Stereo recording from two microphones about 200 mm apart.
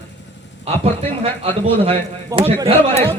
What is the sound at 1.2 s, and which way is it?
Speech, 25° right (ahead or behind).